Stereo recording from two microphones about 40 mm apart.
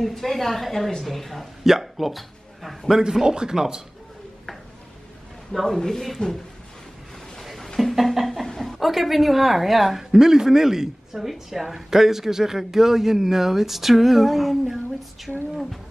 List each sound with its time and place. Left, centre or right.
0.0 s a woman's voice: centre
1.6 s hiccup: centre
3.0 s speech: centre
5.5 s a woman's voice: centre
7.3 s a sound: centre
8.8 s a woman's voice: centre